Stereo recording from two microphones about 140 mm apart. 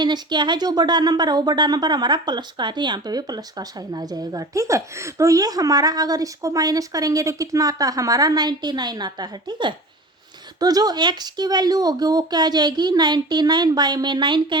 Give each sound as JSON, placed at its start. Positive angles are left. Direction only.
{"t": 0.0, "sound": "speech", "side_deg": -30}